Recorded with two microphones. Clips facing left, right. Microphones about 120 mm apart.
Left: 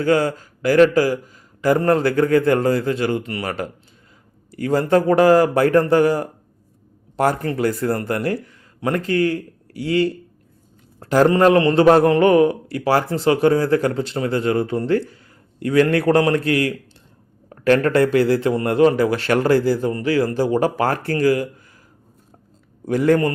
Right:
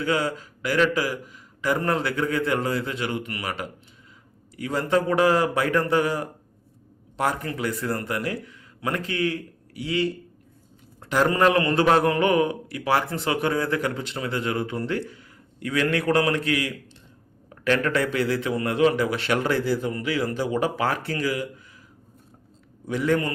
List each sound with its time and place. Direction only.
0.0 s speech: 40° left (ahead or behind)
11.0 s a sound: 40° left (ahead or behind)
11.3 s speech: 30° left (ahead or behind)
22.9 s a man's voice: 45° left (ahead or behind)